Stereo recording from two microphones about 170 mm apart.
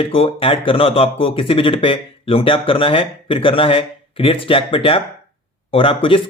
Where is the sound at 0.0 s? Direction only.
35° left (ahead or behind).